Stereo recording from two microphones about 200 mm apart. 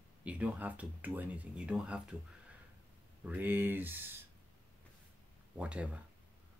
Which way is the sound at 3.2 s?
10° right (ahead or behind).